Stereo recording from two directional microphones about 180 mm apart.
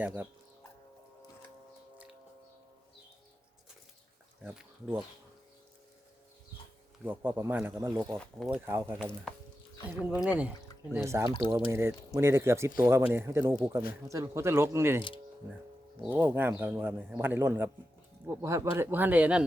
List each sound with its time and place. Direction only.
0.0 s speech: 10° right (ahead or behind)
4.4 s speech: 5° right (ahead or behind)
7.0 s speech: 10° right (ahead or behind)
9.7 s speech: 20° left (ahead or behind)
10.2 s speech: 5° right (ahead or behind)
11.3 s speech: 25° left (ahead or behind)
11.5 s speech: 15° right (ahead or behind)
16.1 s speech: 10° right (ahead or behind)